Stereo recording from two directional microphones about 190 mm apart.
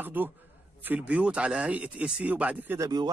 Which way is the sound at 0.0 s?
10° right (ahead or behind).